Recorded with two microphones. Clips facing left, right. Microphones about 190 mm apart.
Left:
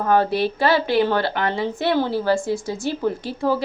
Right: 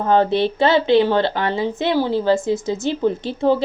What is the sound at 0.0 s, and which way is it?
A woman's voice, 20° right (ahead or behind).